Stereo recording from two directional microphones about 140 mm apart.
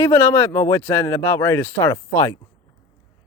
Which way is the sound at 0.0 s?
20° left (ahead or behind).